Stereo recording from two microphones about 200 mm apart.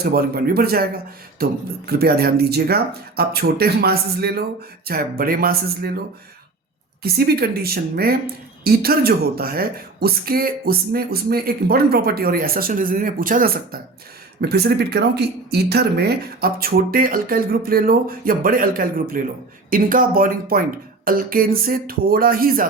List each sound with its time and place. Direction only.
0.0 s speech: 50° right (ahead or behind)
7.0 s speech: 50° right (ahead or behind)